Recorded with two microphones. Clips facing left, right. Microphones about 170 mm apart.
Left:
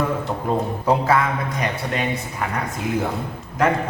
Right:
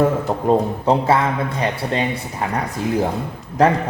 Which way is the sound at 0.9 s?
30° right (ahead or behind).